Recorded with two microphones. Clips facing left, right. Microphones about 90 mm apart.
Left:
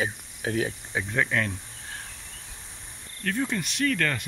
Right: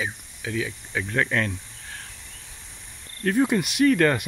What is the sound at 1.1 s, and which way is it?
Speech, 5° left (ahead or behind).